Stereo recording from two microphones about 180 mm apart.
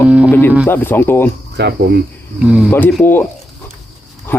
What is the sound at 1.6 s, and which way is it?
Speech, 70° right (ahead or behind).